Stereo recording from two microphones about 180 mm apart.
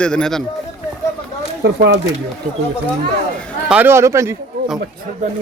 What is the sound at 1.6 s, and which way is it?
Speech, 75° right (ahead or behind).